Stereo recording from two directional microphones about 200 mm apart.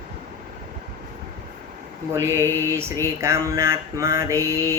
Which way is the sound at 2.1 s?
15° right (ahead or behind).